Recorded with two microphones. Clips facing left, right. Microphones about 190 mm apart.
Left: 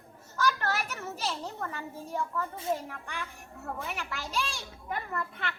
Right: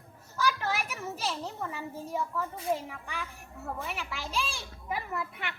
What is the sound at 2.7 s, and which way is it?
A child's voice, 5° right (ahead or behind).